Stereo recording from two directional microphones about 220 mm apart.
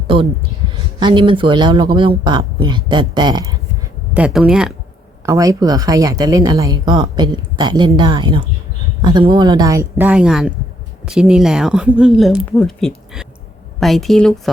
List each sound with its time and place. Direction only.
0.9 s speech: 20° right (ahead or behind)
4.1 s speech: 5° right (ahead or behind)
5.2 s speech: 15° right (ahead or behind); by 14.5 s centre (ahead or behind)